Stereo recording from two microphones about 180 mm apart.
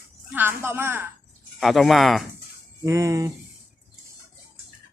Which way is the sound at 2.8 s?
15° right (ahead or behind).